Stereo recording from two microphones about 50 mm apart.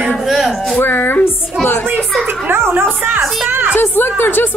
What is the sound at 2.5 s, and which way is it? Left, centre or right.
Speech, right.